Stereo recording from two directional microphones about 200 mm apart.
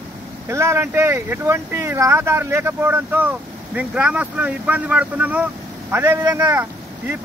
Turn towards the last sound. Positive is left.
turn(degrees=-10)  # may be behind; listen again after turning